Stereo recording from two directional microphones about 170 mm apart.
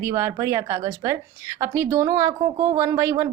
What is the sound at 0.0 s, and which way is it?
Speech, 15° right (ahead or behind).